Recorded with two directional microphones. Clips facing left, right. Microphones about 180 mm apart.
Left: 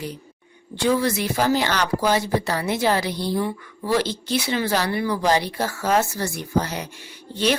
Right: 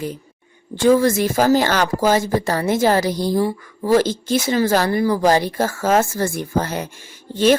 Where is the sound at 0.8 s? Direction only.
45° right (ahead or behind).